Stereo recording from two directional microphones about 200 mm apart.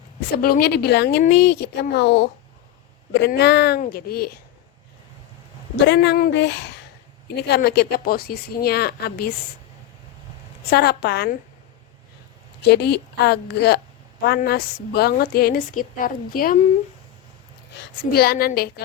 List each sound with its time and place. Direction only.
0.4 s a woman's voice: 50° left (ahead or behind)
5.8 s a woman's voice: 60° left (ahead or behind)
10.7 s a woman's voice: 55° left (ahead or behind)
12.7 s a woman's voice: 55° left (ahead or behind)
17.7 s a woman's voice: 50° left (ahead or behind)